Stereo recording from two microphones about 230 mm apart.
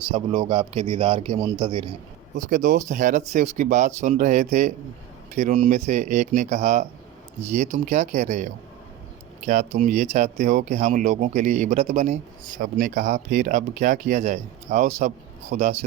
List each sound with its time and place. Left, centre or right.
0.1 s a man's voice: right
2.3 s speech: right
9.5 s speech: right